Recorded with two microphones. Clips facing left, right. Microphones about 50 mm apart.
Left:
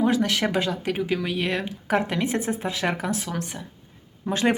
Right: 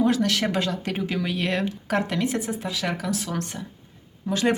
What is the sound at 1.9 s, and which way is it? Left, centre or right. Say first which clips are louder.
A woman's voice: left 2 dB; centre.